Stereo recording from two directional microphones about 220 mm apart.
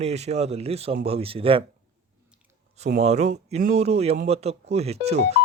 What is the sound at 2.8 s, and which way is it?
Speech, 30° right (ahead or behind).